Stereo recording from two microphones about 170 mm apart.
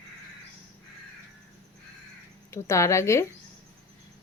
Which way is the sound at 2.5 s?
15° left (ahead or behind).